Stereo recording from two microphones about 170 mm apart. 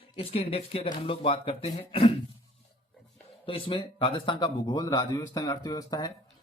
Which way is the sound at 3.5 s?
30° left (ahead or behind).